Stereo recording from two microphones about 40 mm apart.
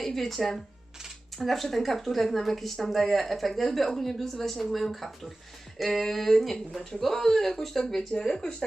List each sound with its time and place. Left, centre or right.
0.2 s speech: centre